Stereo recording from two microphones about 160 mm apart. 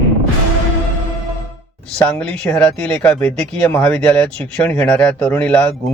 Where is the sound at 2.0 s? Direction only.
5° left (ahead or behind).